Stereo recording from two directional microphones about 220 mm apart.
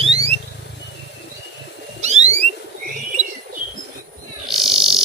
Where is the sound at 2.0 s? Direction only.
30° right (ahead or behind).